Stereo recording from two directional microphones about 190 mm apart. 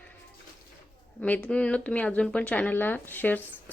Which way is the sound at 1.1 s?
10° left (ahead or behind).